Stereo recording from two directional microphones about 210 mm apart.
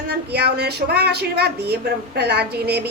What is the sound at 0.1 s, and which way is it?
A woman's voice, 50° right (ahead or behind).